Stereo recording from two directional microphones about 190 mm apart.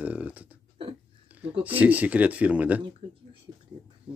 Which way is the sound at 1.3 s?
10° right (ahead or behind).